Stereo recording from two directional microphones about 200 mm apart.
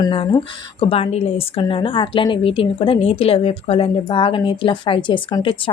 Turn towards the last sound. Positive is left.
turn(degrees=25)  # may be behind; listen again after turning